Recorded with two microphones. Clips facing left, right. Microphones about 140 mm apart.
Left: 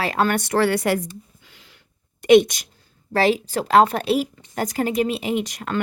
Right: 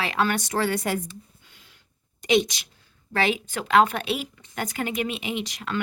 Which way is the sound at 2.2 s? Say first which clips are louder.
Left 8 dB; 55° left (ahead or behind).